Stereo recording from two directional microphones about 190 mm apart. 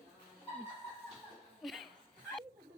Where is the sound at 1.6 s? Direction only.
Centre (ahead or behind).